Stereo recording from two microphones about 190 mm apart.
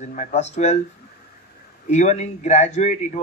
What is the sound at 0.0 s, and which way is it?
Speech, 40° left (ahead or behind).